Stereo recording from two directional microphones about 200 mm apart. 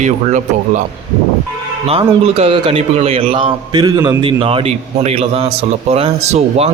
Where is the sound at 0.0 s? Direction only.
35° right (ahead or behind).